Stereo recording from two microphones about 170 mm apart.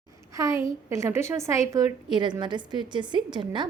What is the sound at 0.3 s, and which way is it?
A woman's voice, 20° right (ahead or behind).